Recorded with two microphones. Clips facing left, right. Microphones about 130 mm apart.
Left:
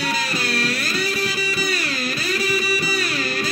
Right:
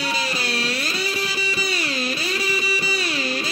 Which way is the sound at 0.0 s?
25° right (ahead or behind).